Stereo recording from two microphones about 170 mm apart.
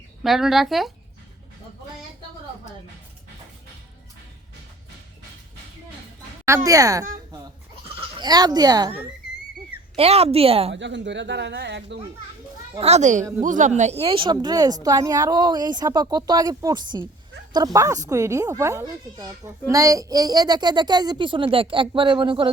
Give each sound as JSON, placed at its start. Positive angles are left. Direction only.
{"t": 0.2, "sound": "speech", "side_deg": 0}
{"t": 6.7, "sound": "a child's voice", "side_deg": -20}
{"t": 8.2, "sound": "a child's voice", "side_deg": -25}
{"t": 9.9, "sound": "a woman's voice", "side_deg": -35}
{"t": 10.8, "sound": "a man's voice", "side_deg": -90}
{"t": 12.8, "sound": "a child's voice", "side_deg": -40}